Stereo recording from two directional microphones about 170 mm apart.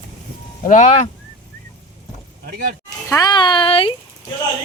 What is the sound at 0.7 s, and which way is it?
Speech, 45° left (ahead or behind).